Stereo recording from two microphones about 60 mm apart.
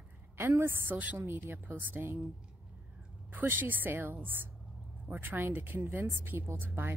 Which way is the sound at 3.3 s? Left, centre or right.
Right.